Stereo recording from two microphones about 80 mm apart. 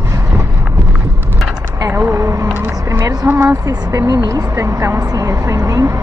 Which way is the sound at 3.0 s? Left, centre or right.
Right.